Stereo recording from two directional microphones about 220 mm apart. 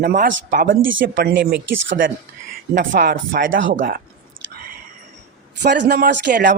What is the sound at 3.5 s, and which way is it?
Speech, 60° right (ahead or behind).